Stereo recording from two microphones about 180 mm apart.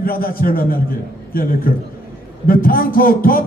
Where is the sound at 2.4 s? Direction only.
55° left (ahead or behind).